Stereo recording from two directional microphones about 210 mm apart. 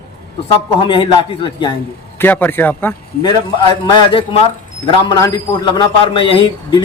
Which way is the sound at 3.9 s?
25° left (ahead or behind).